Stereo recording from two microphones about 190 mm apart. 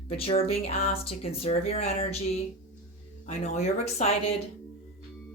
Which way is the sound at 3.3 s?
35° left (ahead or behind).